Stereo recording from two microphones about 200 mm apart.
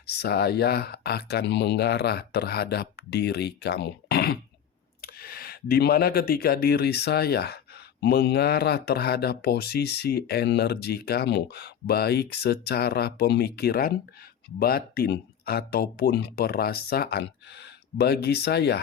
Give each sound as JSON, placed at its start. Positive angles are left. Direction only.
{"t": 0.2, "sound": "speech", "side_deg": 55}